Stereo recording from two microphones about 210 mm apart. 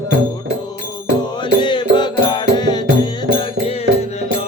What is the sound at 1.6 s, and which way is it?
Music, 20° left (ahead or behind).